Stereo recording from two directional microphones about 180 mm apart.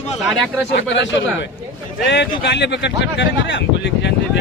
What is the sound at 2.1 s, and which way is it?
Speech, 75° left (ahead or behind).